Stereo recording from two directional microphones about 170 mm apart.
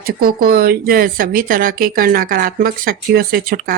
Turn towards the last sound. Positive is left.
turn(degrees=-60)  # may be behind; listen again after turning